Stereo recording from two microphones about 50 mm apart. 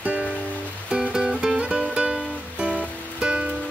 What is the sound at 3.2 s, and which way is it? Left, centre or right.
Music, right.